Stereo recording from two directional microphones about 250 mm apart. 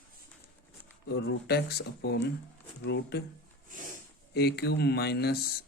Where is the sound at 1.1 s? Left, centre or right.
Left.